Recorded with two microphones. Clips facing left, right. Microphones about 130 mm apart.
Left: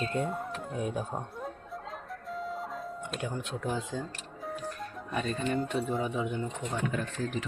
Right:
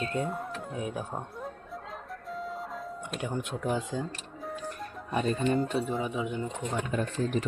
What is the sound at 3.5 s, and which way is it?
Speech, 10° right (ahead or behind).